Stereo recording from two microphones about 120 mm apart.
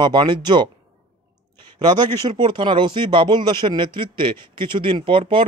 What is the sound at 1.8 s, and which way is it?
A man's voice, 40° right (ahead or behind).